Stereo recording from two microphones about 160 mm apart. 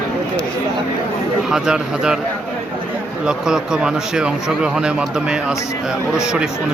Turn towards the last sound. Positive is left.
turn(degrees=-5)  # may be behind; listen again after turning